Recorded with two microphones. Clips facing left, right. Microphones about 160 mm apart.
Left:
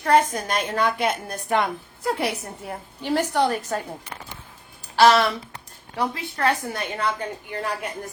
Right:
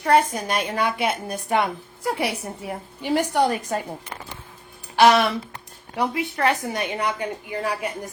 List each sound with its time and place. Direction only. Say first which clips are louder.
0.0 s a woman's voice: even; 10° right (ahead or behind)
4.9 s a woman's voice: even; 15° right (ahead or behind)
7.4 s a woman's voice: right 2 dB; 5° right (ahead or behind)